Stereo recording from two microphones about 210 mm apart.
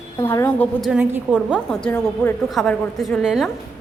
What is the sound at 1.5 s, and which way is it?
A woman's voice, 5° left (ahead or behind).